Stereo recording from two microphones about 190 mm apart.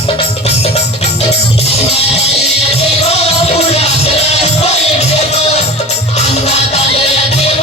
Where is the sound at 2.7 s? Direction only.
35° left (ahead or behind).